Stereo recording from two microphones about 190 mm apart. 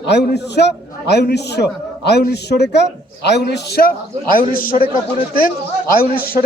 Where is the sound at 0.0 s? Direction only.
60° left (ahead or behind); by 4.8 s 45° left (ahead or behind).